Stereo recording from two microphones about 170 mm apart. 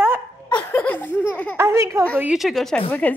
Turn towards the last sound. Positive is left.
turn(degrees=10)  # may be behind; listen again after turning